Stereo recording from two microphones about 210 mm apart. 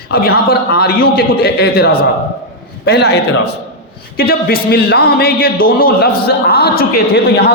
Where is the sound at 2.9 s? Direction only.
50° left (ahead or behind).